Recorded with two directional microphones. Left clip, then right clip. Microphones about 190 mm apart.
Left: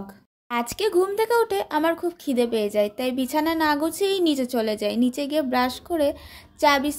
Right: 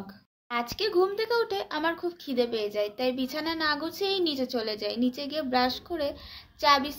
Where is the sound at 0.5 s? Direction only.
45° left (ahead or behind).